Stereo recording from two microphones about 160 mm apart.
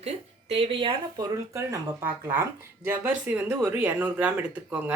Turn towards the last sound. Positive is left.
turn(degrees=-10)  # may be behind; listen again after turning